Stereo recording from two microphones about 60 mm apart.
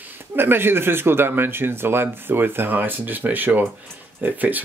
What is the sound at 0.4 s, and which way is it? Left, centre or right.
Speech, right.